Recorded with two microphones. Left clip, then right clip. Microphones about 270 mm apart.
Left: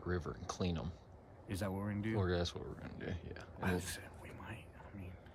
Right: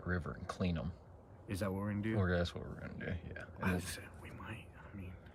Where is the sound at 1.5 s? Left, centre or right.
Centre.